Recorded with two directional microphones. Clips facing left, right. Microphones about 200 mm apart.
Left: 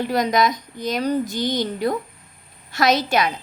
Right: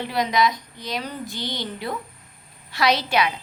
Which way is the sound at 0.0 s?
45° left (ahead or behind).